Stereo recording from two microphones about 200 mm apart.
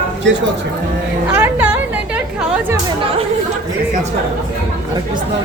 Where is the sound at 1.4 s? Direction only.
10° right (ahead or behind).